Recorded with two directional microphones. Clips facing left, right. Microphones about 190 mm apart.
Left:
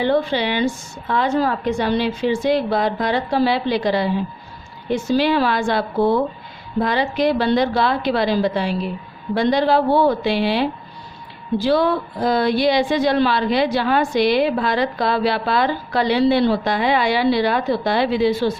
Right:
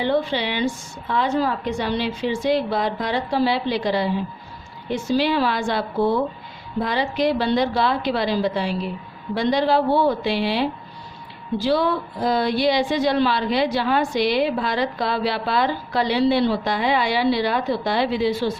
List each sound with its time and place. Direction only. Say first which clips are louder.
0.0 s a woman's voice: left 3 dB; 50° left (ahead or behind)